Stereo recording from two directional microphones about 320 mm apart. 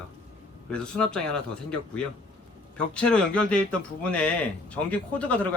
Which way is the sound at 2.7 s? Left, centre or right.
Centre.